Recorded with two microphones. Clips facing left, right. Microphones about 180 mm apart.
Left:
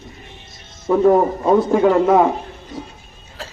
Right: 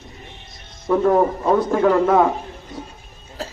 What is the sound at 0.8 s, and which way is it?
Speech, 10° left (ahead or behind).